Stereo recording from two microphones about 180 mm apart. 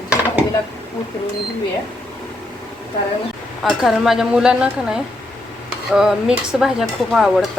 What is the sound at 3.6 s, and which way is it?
Speech, centre (ahead or behind).